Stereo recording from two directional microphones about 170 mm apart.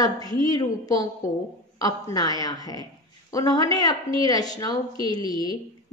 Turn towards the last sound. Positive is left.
turn(degrees=25)  # may be behind; listen again after turning